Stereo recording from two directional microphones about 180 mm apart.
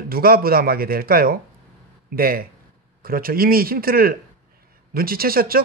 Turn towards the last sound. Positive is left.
turn(degrees=-55)  # may be behind; listen again after turning